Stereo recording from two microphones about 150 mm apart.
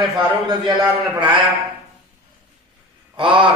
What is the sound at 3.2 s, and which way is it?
Speech, 35° right (ahead or behind).